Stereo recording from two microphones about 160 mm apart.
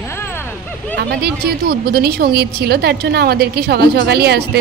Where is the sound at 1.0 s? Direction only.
85° right.